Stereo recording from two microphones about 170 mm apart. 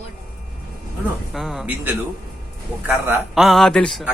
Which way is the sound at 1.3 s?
Centre (ahead or behind).